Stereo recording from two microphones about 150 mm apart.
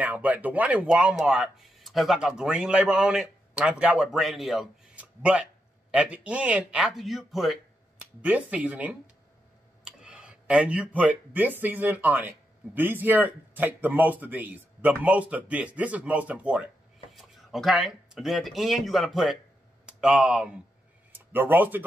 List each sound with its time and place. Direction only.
0.0 s speech: 10° right (ahead or behind)